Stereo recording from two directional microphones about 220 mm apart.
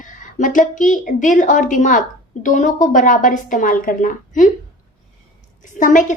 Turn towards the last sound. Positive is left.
turn(degrees=35)  # may be behind; listen again after turning